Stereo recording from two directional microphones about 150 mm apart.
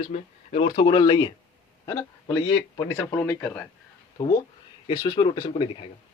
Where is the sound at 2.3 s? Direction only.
30° left (ahead or behind).